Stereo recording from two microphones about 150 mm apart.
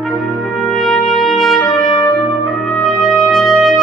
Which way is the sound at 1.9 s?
25° left (ahead or behind).